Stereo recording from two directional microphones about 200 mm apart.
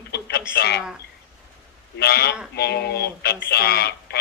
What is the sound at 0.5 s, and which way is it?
Speech, 55° left (ahead or behind).